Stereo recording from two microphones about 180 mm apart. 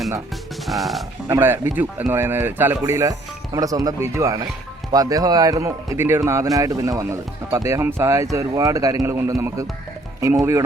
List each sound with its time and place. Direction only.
0.7 s speech: centre (ahead or behind)
1.3 s speech: 15° right (ahead or behind)